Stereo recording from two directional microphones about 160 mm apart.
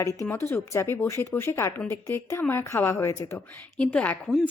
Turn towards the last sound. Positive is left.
turn(degrees=10)  # may be behind; listen again after turning